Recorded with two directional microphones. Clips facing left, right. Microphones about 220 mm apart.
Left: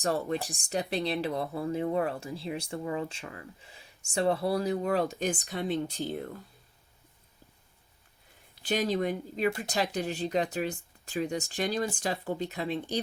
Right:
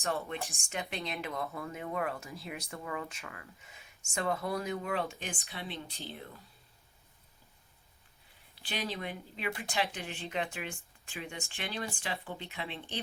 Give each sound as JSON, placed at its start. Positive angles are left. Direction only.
{"t": 0.0, "sound": "speech", "side_deg": 35}
{"t": 8.6, "sound": "speech", "side_deg": 45}